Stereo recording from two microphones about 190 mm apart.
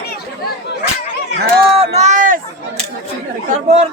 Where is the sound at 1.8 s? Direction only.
35° right (ahead or behind).